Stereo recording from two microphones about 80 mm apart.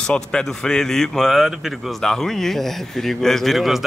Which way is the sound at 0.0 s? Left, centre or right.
Centre.